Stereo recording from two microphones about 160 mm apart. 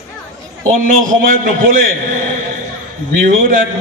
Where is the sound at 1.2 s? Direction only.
55° right (ahead or behind).